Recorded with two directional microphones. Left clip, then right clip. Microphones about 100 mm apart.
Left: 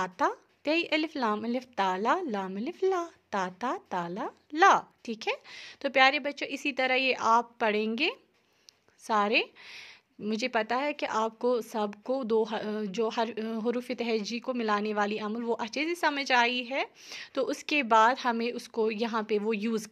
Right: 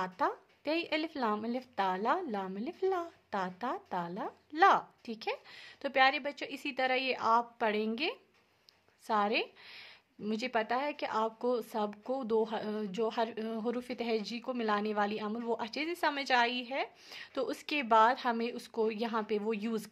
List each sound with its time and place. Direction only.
0.0 s a woman's voice: 35° left (ahead or behind)